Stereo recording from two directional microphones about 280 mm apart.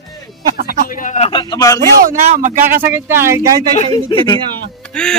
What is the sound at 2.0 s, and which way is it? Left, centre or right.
Speech, right.